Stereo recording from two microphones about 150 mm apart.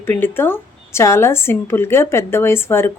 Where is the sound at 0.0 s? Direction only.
15° left (ahead or behind).